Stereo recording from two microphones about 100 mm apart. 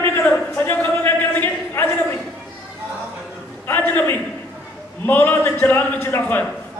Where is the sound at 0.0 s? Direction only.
20° left (ahead or behind).